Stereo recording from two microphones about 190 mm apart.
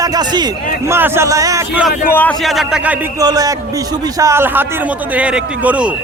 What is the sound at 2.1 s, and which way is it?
Speech, 10° left (ahead or behind).